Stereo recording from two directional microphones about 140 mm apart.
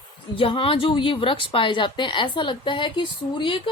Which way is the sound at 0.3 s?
40° left (ahead or behind).